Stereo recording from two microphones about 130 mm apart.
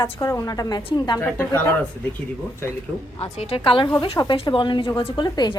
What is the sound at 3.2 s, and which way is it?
A woman's voice, 45° left (ahead or behind).